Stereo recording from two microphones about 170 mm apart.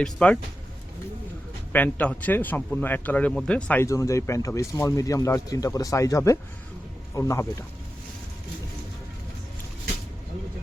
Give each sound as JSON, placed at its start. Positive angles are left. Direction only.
{"t": 0.0, "sound": "speech", "side_deg": 5}
{"t": 1.7, "sound": "speech", "side_deg": 10}